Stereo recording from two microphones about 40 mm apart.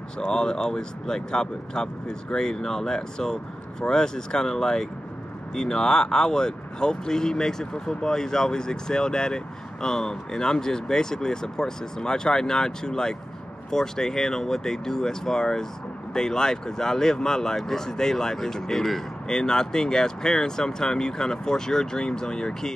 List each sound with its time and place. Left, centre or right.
0.2 s speech: centre